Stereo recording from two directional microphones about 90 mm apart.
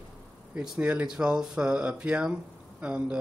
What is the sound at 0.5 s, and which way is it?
Speech, 15° right (ahead or behind).